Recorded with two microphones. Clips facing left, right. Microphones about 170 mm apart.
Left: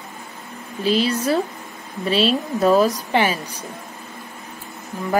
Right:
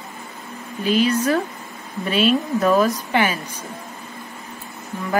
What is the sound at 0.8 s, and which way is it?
Speech, 35° left (ahead or behind).